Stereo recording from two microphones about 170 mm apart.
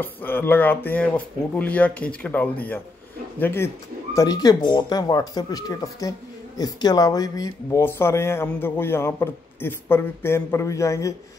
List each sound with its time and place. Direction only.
0.0 s speech: 10° left (ahead or behind)